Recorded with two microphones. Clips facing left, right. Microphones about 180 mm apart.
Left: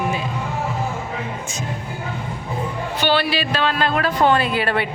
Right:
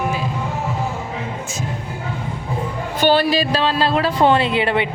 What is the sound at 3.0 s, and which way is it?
Speech, 45° right (ahead or behind).